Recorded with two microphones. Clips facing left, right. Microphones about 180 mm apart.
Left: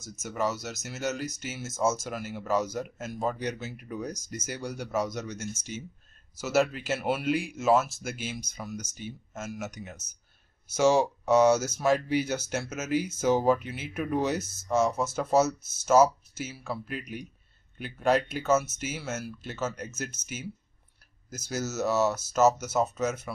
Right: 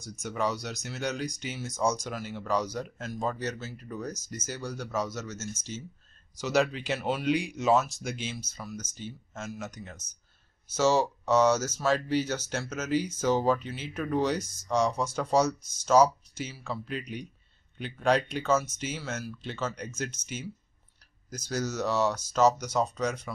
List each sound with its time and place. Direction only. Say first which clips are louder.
0.0 s speech: even; 5° left (ahead or behind)